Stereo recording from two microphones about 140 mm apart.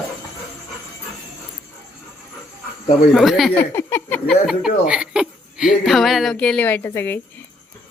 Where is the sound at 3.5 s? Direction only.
15° left (ahead or behind).